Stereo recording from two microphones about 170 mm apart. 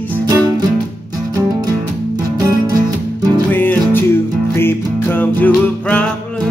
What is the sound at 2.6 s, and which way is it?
Music, 20° right (ahead or behind).